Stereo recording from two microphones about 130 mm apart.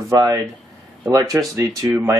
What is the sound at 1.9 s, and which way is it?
Speech, 15° right (ahead or behind).